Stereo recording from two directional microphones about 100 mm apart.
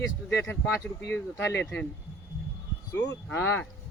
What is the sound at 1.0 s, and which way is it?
Speech, 25° left (ahead or behind).